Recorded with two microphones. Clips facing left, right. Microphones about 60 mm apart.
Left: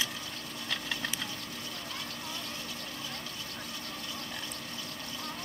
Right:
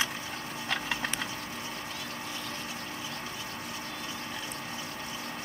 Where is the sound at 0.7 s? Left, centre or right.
Right.